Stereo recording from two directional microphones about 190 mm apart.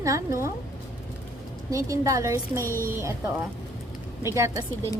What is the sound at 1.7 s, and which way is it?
Speech, 15° right (ahead or behind).